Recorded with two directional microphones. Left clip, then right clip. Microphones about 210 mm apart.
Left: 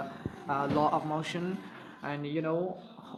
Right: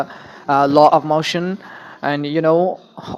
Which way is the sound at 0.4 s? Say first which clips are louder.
Right 18 dB; 40° right (ahead or behind).